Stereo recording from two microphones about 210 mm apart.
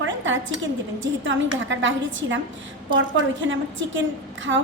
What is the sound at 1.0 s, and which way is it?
A woman's voice, 65° right (ahead or behind).